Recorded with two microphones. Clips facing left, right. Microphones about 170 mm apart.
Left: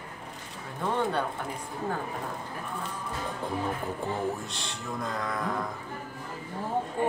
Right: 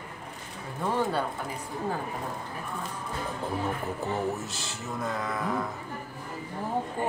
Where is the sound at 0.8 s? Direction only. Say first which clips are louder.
Even; 5° right (ahead or behind).